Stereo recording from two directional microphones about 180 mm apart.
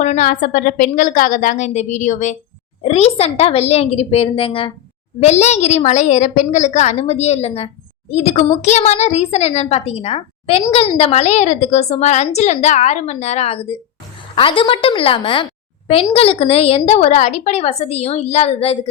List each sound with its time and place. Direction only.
0.0 s a woman's voice: 45° left (ahead or behind)